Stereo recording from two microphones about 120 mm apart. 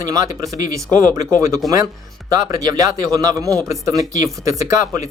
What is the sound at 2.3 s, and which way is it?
Speech, 30° right (ahead or behind).